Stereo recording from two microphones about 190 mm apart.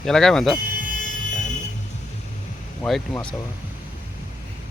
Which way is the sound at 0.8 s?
45° left (ahead or behind).